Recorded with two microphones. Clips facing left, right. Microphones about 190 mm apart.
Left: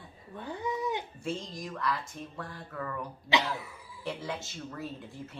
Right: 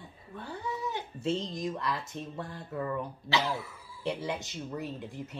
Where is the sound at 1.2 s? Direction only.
25° right (ahead or behind).